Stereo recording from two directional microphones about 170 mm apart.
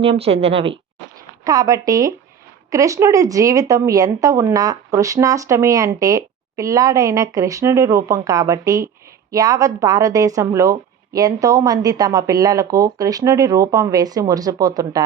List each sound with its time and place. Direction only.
0.0 s speech: 35° right (ahead or behind)
1.5 s speech: 20° right (ahead or behind)